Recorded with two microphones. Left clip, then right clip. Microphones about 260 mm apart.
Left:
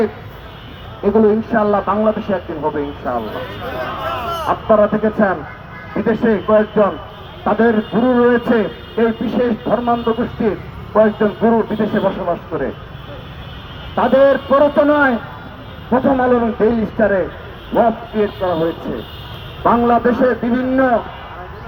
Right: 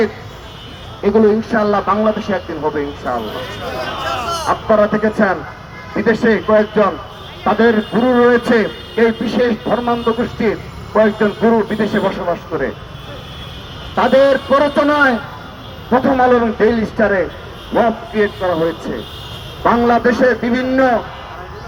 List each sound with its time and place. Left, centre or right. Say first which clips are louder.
1.0 s a man's voice: right 1 dB; right
4.4 s a man's voice: even; right
13.9 s a man's voice: right 1 dB; right